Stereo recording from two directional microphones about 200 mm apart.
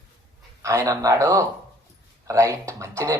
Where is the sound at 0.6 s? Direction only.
15° right (ahead or behind).